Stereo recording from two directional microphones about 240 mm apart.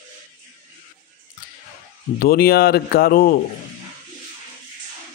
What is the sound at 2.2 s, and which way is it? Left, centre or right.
A man's voice, left.